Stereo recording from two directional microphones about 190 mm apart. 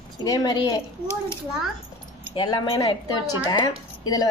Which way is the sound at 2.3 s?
25° left (ahead or behind).